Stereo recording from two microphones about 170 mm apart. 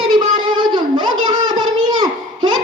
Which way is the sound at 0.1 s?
25° right (ahead or behind).